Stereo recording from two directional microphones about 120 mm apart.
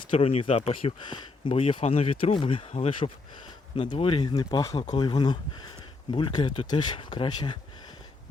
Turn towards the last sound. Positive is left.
turn(degrees=40)  # may be behind; listen again after turning